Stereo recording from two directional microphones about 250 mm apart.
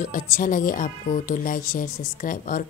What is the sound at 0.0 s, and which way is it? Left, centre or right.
Speech, left.